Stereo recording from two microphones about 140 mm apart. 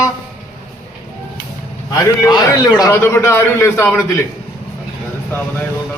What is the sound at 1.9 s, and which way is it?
A man's voice, 20° left (ahead or behind).